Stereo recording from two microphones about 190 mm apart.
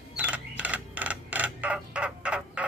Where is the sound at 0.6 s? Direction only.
10° right (ahead or behind).